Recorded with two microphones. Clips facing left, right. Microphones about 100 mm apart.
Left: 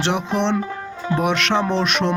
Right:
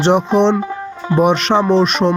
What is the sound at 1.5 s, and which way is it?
Speech, 10° right (ahead or behind).